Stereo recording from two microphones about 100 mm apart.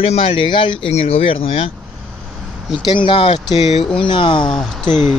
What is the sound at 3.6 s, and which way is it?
Speech, 90° left.